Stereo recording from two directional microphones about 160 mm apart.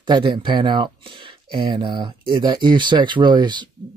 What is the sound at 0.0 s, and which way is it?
Speech, 30° right (ahead or behind).